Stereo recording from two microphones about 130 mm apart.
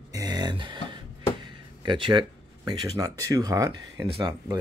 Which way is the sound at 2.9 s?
25° right (ahead or behind).